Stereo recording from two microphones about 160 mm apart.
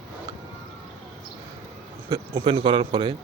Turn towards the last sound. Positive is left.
turn(degrees=-30)  # may be behind; listen again after turning